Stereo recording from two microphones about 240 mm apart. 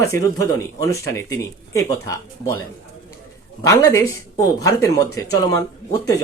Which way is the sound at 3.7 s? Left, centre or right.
Centre.